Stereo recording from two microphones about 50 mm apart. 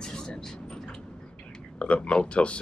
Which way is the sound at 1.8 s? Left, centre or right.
Left.